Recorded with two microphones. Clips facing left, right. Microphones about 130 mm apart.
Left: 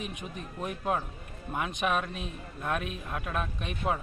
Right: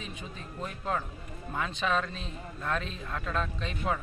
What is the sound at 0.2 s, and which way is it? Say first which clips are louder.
A man's voice: left 2 dB; 15° left (ahead or behind).